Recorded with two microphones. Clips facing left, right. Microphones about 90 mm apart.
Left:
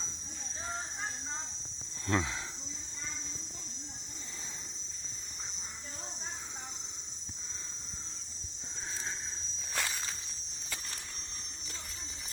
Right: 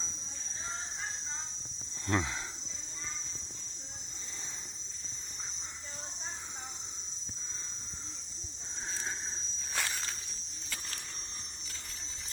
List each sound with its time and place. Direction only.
2.0 s speech: 5° right (ahead or behind)
9.7 s walk: centre (ahead or behind)